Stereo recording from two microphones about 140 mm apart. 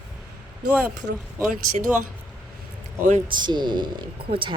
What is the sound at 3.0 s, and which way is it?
Speech, 60° right (ahead or behind).